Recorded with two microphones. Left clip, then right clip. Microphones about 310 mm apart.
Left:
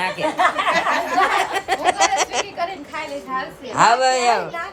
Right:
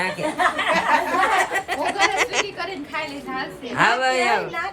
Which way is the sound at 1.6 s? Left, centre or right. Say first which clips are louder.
Left 5 dB; left.